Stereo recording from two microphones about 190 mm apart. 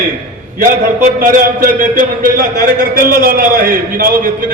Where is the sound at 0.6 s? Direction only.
50° right (ahead or behind).